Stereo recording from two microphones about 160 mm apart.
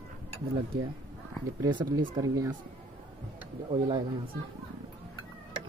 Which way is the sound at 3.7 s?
30° right (ahead or behind).